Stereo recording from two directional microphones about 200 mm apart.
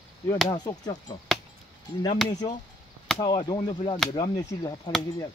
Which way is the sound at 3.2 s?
20° left (ahead or behind).